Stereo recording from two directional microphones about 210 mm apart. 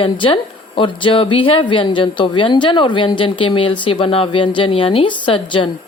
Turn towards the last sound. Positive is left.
turn(degrees=25)  # may be behind; listen again after turning